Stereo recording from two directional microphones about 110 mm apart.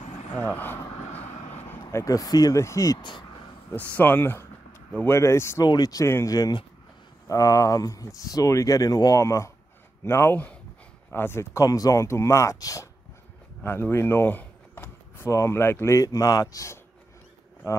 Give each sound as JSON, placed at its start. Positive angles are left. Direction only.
{"t": 0.0, "sound": "vehicle", "side_deg": 90}
{"t": 0.6, "sound": "vehicle", "side_deg": 15}
{"t": 1.5, "sound": "a sound", "side_deg": 20}
{"t": 1.9, "sound": "speech", "side_deg": 30}
{"t": 3.0, "sound": "speech", "side_deg": 45}
{"t": 3.7, "sound": "speech", "side_deg": 15}
{"t": 5.7, "sound": "speech", "side_deg": 35}
{"t": 13.6, "sound": "speech", "side_deg": 20}